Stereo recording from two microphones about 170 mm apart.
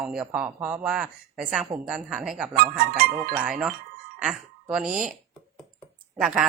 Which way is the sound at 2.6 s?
60° right (ahead or behind).